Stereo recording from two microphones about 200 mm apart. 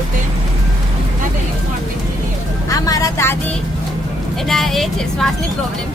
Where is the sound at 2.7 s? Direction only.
15° left (ahead or behind).